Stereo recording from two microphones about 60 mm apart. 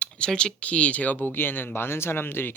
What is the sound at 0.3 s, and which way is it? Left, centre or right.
Speech, centre.